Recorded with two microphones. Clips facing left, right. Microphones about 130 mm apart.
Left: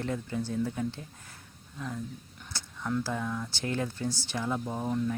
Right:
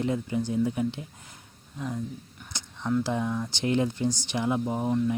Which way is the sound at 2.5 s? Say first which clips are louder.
Right 5 dB; 15° right (ahead or behind).